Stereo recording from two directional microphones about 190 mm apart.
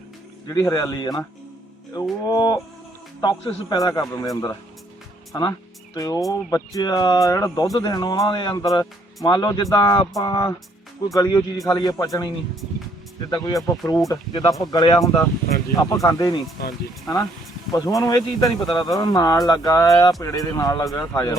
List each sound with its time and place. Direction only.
0.4 s speech: 15° left (ahead or behind)
2.2 s speech: 20° left (ahead or behind)
13.3 s speech: 20° left (ahead or behind)
17.7 s speech: 20° left (ahead or behind)